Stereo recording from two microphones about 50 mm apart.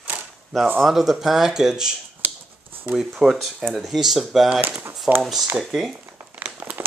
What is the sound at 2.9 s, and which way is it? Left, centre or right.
Speech, centre.